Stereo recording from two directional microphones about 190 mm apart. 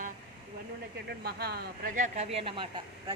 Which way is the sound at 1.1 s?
55° right (ahead or behind).